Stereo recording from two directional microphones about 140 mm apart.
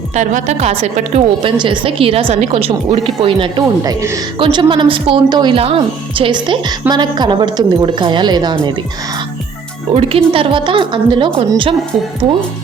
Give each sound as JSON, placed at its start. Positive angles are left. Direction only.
{"t": 0.1, "sound": "a woman's voice", "side_deg": -60}
{"t": 1.5, "sound": "a woman's voice", "side_deg": -35}
{"t": 3.8, "sound": "a woman's voice", "side_deg": -20}
{"t": 4.4, "sound": "a woman's voice", "side_deg": -35}
{"t": 9.9, "sound": "a woman's voice", "side_deg": -40}